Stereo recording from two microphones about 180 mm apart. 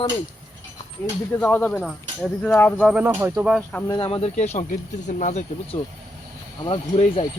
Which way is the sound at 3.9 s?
30° left (ahead or behind).